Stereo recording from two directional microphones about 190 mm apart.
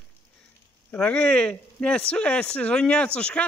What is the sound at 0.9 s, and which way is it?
Speech, 5° left (ahead or behind).